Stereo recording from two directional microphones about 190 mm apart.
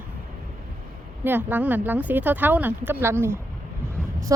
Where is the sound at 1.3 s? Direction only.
10° right (ahead or behind).